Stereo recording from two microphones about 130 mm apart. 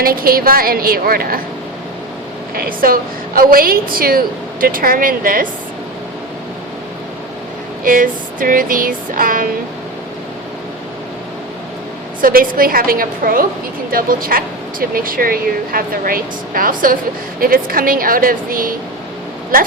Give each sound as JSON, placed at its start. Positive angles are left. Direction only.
{"t": 0.2, "sound": "speech", "side_deg": -90}
{"t": 2.6, "sound": "speech", "side_deg": -90}
{"t": 7.9, "sound": "speech", "side_deg": -90}
{"t": 12.2, "sound": "speech", "side_deg": -90}